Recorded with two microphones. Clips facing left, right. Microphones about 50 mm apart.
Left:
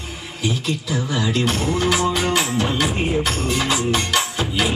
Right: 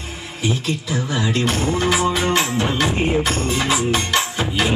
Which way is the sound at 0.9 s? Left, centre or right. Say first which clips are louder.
Even; centre.